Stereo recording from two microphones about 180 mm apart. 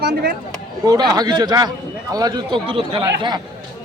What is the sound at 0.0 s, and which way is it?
Speech, 60° right (ahead or behind).